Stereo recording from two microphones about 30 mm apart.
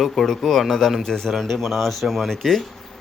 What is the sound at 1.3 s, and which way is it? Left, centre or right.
Speech, centre.